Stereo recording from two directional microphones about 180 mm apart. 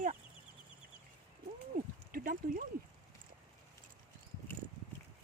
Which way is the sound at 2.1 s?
50° right (ahead or behind).